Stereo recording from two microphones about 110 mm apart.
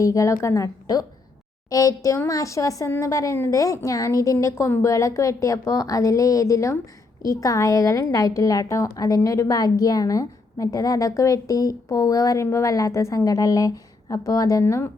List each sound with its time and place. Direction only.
0.0 s a woman's voice: 30° left (ahead or behind)